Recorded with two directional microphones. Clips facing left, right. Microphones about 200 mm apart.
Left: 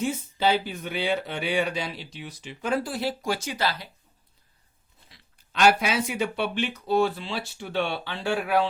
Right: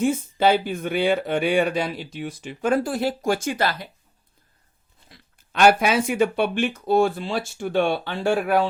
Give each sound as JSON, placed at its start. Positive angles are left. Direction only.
{"t": 0.0, "sound": "speech", "side_deg": -50}
{"t": 5.0, "sound": "speech", "side_deg": -50}